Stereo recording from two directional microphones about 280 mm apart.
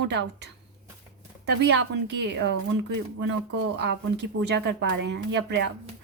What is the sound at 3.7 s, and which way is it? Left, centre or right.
Speech, right.